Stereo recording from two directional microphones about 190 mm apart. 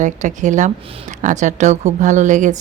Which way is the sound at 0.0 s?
40° right (ahead or behind).